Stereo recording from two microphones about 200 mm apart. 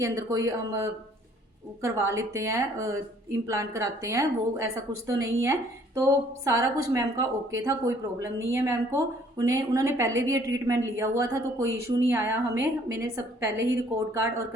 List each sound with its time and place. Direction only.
0.0 s a woman's voice: 15° right (ahead or behind)